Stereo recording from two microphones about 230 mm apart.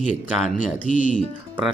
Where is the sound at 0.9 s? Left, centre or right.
Left.